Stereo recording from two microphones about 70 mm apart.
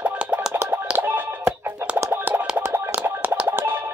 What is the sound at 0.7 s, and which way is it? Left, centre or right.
Music, right.